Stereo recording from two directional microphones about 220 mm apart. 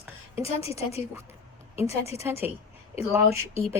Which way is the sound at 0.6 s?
25° left (ahead or behind).